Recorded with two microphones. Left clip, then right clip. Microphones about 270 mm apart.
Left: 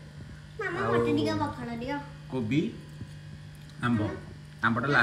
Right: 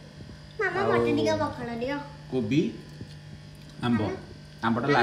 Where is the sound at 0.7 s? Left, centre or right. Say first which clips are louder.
Right 2 dB; centre.